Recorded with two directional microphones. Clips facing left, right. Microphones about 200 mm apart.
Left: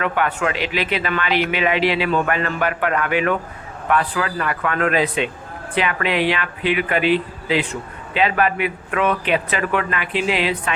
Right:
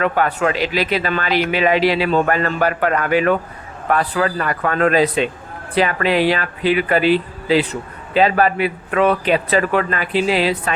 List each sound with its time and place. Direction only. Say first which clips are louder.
0.0 s speech: right 3 dB; 40° right (ahead or behind)